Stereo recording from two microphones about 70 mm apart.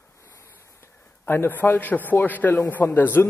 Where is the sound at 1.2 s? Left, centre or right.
Left.